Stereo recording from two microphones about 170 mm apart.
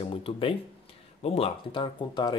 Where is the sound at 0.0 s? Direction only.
30° left (ahead or behind).